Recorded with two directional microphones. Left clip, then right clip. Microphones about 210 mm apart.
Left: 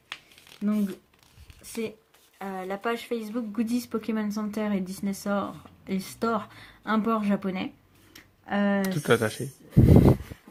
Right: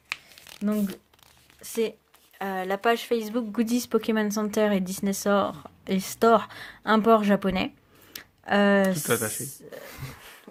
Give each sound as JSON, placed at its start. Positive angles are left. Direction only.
{"t": 1.6, "sound": "speech", "side_deg": -35}
{"t": 8.1, "sound": "a sound", "side_deg": -45}
{"t": 8.8, "sound": "speech", "side_deg": 15}